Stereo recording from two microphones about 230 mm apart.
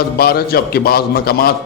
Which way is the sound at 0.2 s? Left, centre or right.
Left.